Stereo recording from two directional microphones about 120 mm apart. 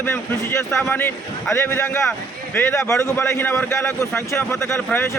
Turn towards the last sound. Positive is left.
turn(degrees=20)  # may be behind; listen again after turning